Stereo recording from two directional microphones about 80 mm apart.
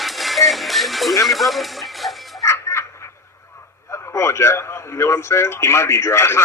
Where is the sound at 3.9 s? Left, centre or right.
Left.